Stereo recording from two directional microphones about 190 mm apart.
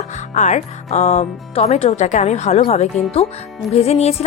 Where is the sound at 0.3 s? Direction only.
40° left (ahead or behind).